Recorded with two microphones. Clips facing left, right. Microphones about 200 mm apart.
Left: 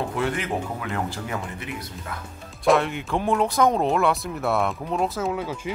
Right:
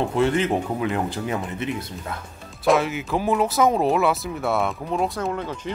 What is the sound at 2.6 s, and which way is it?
Speech, centre (ahead or behind).